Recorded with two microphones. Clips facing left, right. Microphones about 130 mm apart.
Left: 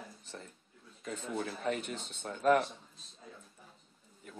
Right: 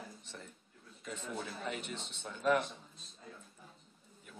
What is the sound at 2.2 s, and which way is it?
Speech, 50° left (ahead or behind).